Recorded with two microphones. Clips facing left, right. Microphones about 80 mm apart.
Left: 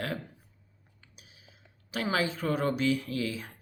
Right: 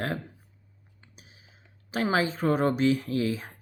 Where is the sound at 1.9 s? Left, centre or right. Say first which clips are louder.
Right 4 dB; right.